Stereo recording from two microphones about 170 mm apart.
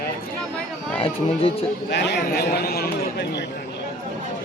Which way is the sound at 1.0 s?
35° left (ahead or behind).